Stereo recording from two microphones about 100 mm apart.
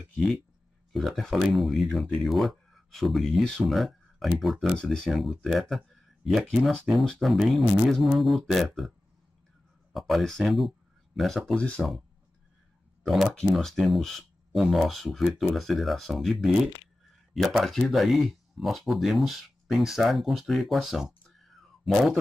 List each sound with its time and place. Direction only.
0.9 s speech: centre (ahead or behind)
9.9 s speech: centre (ahead or behind)
13.0 s speech: centre (ahead or behind)